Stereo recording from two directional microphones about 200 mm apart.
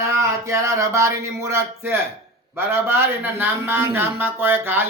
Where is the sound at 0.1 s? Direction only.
15° right (ahead or behind).